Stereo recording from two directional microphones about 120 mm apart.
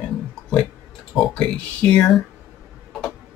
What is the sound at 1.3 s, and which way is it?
Speech, 10° left (ahead or behind).